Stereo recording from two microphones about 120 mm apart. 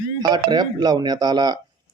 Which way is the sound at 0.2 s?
35° right (ahead or behind).